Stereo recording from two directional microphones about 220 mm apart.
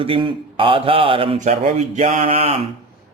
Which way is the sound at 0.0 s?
25° right (ahead or behind).